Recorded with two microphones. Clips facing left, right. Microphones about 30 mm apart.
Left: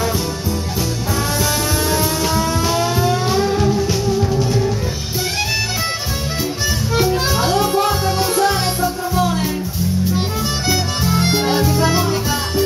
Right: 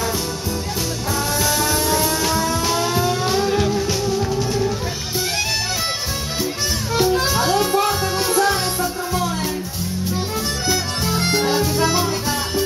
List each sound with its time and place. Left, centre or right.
1.4 s music: centre
6.9 s music: centre
11.2 s music: centre
11.6 s music: centre
11.9 s music: centre